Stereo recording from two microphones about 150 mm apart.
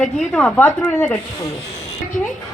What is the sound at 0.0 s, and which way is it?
A woman's voice, 5° left (ahead or behind).